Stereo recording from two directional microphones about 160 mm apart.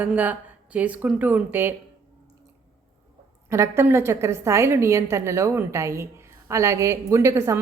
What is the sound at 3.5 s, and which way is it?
A woman's voice, 15° right (ahead or behind).